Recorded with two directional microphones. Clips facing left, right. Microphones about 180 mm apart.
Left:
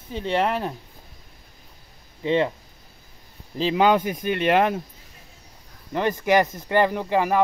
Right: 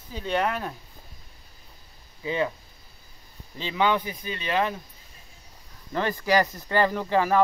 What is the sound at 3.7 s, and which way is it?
Speech, 45° left (ahead or behind).